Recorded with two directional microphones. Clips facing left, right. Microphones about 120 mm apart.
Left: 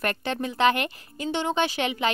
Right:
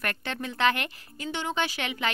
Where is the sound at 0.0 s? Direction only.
20° left (ahead or behind).